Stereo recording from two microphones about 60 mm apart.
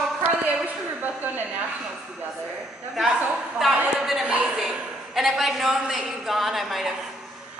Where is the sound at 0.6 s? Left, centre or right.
Right.